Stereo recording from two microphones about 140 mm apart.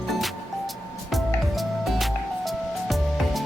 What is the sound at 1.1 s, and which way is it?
Music, centre (ahead or behind).